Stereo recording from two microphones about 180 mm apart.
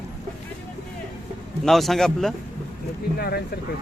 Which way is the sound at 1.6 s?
Centre (ahead or behind).